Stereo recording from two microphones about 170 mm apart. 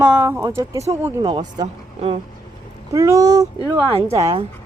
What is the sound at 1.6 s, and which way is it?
Speech, 35° right (ahead or behind).